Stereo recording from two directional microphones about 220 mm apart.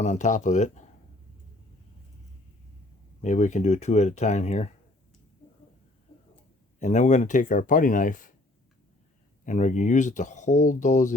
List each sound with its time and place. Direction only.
0.0 s speech: 30° left (ahead or behind)
3.2 s speech: 30° left (ahead or behind)
6.7 s speech: 35° left (ahead or behind)
9.4 s speech: 35° left (ahead or behind)